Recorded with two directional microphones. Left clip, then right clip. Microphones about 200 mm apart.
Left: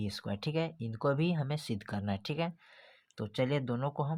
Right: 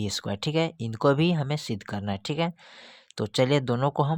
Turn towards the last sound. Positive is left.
turn(degrees=-40)  # may be behind; listen again after turning